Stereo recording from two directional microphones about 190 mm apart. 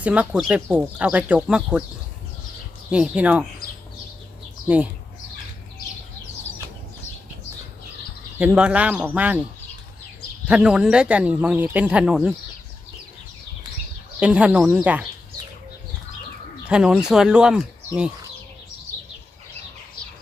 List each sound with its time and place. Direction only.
0.0 s speech: 5° right (ahead or behind)
2.9 s speech: 5° right (ahead or behind)
8.4 s speech: 5° right (ahead or behind)
10.5 s speech: 5° right (ahead or behind)
14.2 s speech: 5° right (ahead or behind)
16.6 s speech: 5° right (ahead or behind)